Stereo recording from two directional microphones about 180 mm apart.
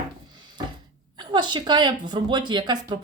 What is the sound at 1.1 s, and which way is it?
A woman's voice, 25° right (ahead or behind).